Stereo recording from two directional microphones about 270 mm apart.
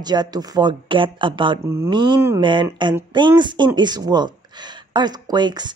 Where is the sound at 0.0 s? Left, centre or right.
Centre.